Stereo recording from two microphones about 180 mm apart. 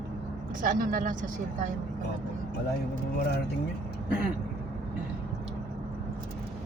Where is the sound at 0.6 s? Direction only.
50° right (ahead or behind).